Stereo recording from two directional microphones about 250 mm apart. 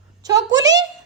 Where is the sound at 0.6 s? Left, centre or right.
Centre.